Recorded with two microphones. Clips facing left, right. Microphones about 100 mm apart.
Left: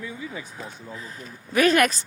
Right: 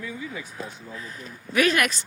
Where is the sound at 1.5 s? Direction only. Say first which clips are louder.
Left 3 dB; 40° left (ahead or behind).